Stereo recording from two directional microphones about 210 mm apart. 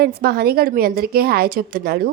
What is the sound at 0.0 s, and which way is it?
A woman's voice, 50° right (ahead or behind).